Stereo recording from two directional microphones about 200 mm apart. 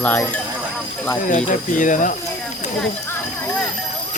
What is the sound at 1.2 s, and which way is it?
Speech, 40° left (ahead or behind).